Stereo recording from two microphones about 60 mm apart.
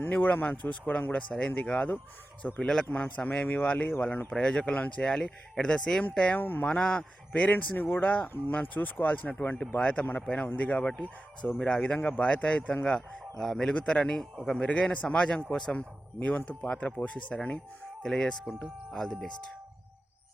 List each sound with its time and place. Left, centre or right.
0.0 s speech: left
4.3 s speech: centre
6.4 s speech: left
6.7 s speech: centre
7.4 s speech: left
13.4 s speech: centre
14.6 s speech: centre
15.7 s speech: left
18.0 s speech: centre